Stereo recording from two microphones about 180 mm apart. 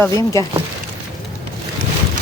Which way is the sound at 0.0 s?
15° left (ahead or behind).